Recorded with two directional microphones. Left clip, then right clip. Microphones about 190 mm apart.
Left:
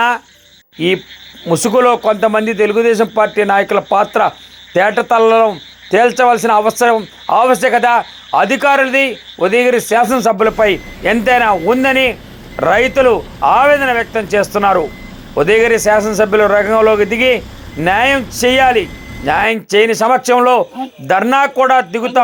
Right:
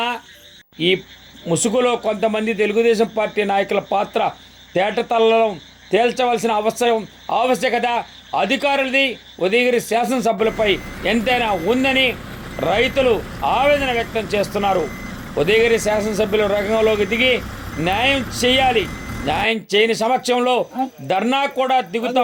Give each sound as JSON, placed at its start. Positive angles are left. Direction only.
{"t": 1.5, "sound": "a man's voice", "side_deg": 15}